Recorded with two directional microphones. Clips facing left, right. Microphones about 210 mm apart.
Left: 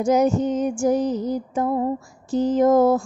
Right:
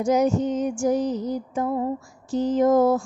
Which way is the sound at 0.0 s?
50° left (ahead or behind).